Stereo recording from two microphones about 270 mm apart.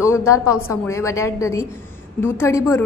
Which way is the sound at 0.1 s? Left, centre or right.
Centre.